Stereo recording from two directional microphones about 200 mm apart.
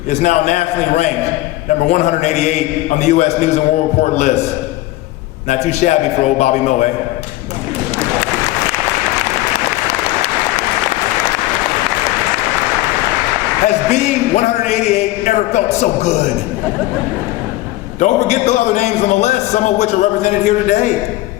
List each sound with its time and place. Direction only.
0.1 s a man's voice: 35° left (ahead or behind)
5.5 s a man's voice: 35° left (ahead or behind)
13.9 s a man's voice: 35° left (ahead or behind)
18.0 s a man's voice: 35° left (ahead or behind)